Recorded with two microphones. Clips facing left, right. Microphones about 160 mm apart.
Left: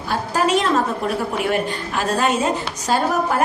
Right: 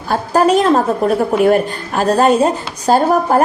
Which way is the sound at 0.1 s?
40° right (ahead or behind).